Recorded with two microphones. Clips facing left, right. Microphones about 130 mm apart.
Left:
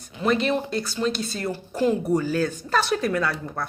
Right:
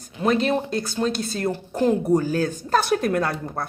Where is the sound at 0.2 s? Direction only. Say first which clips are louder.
Right 2 dB; 45° right (ahead or behind).